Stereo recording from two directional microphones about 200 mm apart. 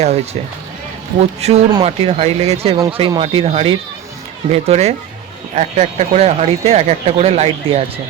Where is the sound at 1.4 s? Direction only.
35° right (ahead or behind).